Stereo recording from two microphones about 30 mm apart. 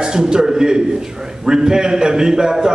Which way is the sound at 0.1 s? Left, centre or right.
Right.